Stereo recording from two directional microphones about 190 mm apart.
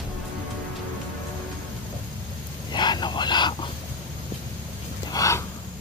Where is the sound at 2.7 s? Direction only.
25° left (ahead or behind).